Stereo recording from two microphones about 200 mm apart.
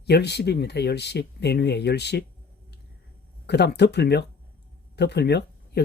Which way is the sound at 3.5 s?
55° left (ahead or behind).